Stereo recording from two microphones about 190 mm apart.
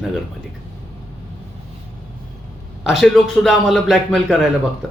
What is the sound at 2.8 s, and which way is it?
A man's voice, centre (ahead or behind).